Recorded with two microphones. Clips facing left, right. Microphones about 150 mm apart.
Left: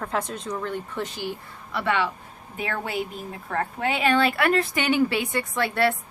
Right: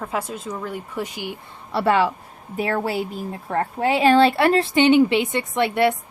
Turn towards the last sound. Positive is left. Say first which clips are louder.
# right 4 dB
turn(degrees=-20)  # may be behind; listen again after turning